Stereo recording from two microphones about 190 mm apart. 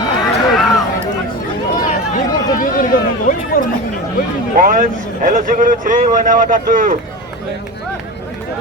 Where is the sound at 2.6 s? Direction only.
45° left (ahead or behind).